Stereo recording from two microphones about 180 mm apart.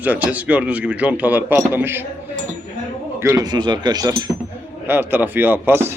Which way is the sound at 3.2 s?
15° right (ahead or behind).